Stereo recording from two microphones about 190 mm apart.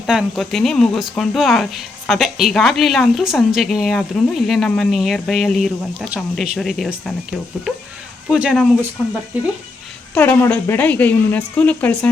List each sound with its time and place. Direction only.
0.0 s speech: centre (ahead or behind)
10.2 s speech: 10° left (ahead or behind)